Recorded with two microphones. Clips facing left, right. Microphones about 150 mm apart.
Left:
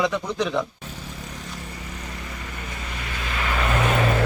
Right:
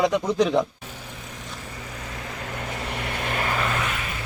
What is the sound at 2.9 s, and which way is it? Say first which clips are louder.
Vehicle: right 3 dB; 60° right (ahead or behind).